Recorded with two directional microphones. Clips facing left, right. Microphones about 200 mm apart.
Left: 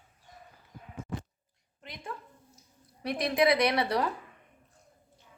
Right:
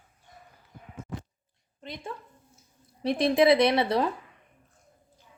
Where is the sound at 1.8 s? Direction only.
25° right (ahead or behind).